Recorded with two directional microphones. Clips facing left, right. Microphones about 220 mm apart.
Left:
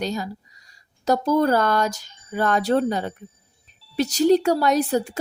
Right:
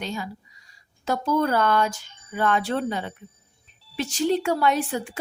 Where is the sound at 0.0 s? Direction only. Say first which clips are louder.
Left 5 dB; 40° left (ahead or behind).